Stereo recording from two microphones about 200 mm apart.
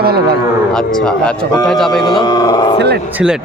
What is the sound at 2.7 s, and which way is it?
Speech, 55° right (ahead or behind).